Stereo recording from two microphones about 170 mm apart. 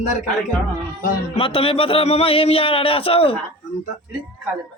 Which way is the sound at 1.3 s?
35° left (ahead or behind).